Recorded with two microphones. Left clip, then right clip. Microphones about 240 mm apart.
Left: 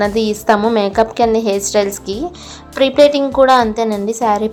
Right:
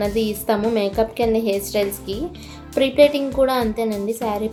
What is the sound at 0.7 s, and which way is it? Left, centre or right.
A woman's voice, left.